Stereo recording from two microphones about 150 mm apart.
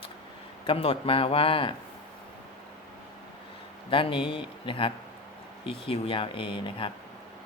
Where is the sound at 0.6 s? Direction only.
40° left (ahead or behind).